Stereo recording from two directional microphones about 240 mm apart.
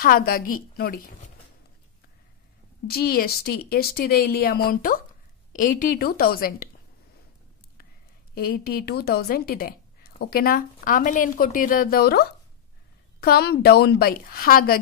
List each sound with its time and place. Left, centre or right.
0.0 s a woman's voice: left
2.9 s a woman's voice: left
8.4 s a woman's voice: left